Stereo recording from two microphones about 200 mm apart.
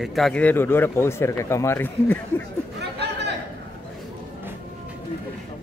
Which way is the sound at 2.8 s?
60° right (ahead or behind).